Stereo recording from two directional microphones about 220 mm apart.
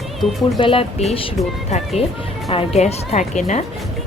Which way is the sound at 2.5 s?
30° left (ahead or behind).